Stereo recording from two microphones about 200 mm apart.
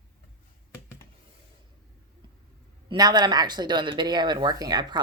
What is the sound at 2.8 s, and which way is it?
Speech, 20° right (ahead or behind).